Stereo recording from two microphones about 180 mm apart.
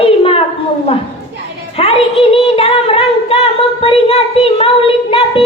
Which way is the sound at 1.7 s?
35° left (ahead or behind).